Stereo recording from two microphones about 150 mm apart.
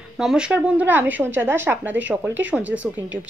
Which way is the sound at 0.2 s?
5° right (ahead or behind).